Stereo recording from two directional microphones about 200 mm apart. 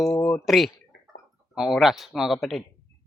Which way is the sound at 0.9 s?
60° left (ahead or behind).